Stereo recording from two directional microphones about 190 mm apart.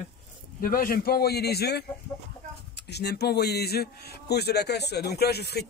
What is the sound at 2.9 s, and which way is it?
A man's voice, 60° left (ahead or behind).